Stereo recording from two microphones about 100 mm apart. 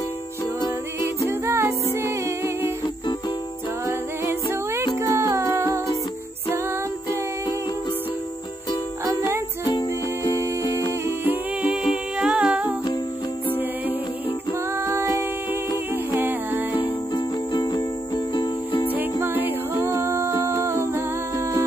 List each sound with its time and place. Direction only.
1.4 s music: 30° right (ahead or behind)
5.1 s music: 30° right (ahead or behind)
9.7 s music: 40° left (ahead or behind)
10.3 s music: 30° right (ahead or behind)
11.6 s music: 10° right (ahead or behind)
14.9 s music: 30° right (ahead or behind)
16.7 s music: 45° left (ahead or behind)
18.9 s music: 20° right (ahead or behind)